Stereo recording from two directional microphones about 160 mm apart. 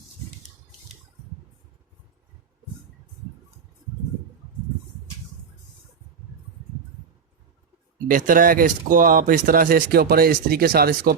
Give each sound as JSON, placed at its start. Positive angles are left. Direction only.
{"t": 8.1, "sound": "speech", "side_deg": -60}